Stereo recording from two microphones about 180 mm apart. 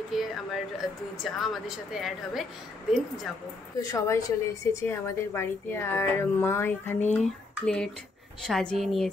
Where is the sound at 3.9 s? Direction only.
15° left (ahead or behind).